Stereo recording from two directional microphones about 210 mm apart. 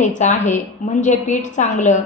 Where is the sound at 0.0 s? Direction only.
35° left (ahead or behind).